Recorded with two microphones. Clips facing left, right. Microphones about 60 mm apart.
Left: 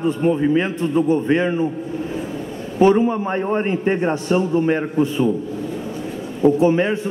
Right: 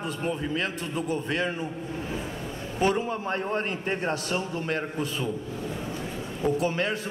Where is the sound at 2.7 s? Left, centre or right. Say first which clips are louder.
Left 11 dB; left.